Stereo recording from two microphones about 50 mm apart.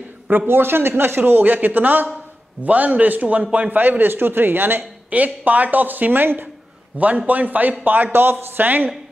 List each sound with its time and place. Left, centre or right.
0.5 s a man's voice: right
5.1 s speech: right